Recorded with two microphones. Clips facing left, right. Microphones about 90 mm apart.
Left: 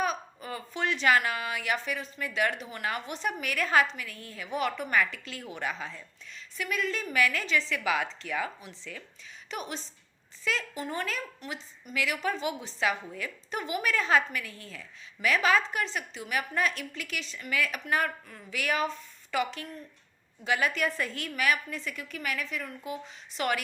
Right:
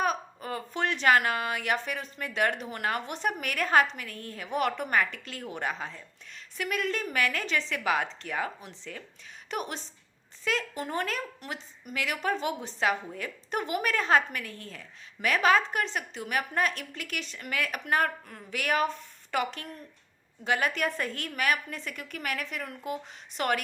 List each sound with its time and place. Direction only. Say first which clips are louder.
0.0 s a woman's voice: right 2 dB; 50° right (ahead or behind)
9.5 s a woman's voice: right 3 dB; 55° right (ahead or behind)